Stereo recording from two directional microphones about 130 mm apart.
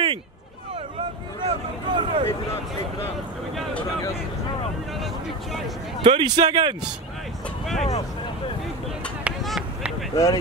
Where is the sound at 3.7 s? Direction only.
10° left (ahead or behind).